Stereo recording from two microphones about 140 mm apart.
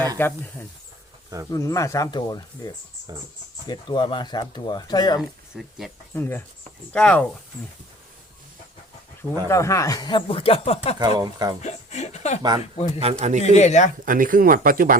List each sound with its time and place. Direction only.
0.2 s speech: 15° left (ahead or behind); by 5.2 s 30° left (ahead or behind)
5.5 s speech: centre (ahead or behind)
6.1 s speech: 15° left (ahead or behind)
9.5 s speech: 20° left (ahead or behind); by 10.8 s 45° left (ahead or behind)
11.2 s speech: 30° right (ahead or behind)
11.6 s speech: 55° left (ahead or behind)
12.4 s speech: 30° right (ahead or behind)
12.7 s speech: 50° left (ahead or behind)
13.1 s speech: 55° right (ahead or behind)
13.4 s speech: 55° left (ahead or behind)
14.0 s speech: 80° right